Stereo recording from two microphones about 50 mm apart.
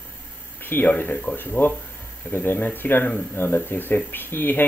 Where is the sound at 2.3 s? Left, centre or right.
Left.